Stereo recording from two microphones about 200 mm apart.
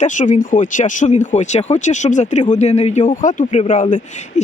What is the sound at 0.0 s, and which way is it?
A man's voice, 40° left (ahead or behind).